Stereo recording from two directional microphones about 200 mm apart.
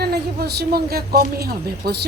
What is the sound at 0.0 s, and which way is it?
A woman's voice, 55° right (ahead or behind).